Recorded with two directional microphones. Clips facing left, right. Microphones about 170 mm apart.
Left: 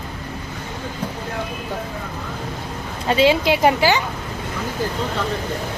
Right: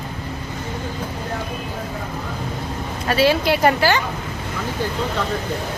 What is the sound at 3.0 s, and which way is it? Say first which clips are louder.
Speech: left 1 dB; 15° left (ahead or behind).